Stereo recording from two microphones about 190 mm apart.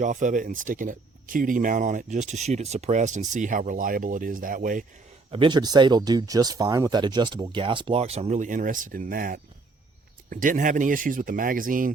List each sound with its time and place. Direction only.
0.0 s speech: 40° right (ahead or behind)
5.3 s speech: 25° right (ahead or behind); by 11.9 s 45° right (ahead or behind)